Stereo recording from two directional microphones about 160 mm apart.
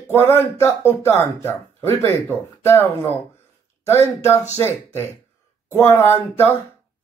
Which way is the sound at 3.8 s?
15° left (ahead or behind).